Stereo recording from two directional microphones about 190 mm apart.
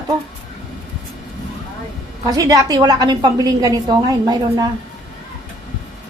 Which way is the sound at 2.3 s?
20° right (ahead or behind).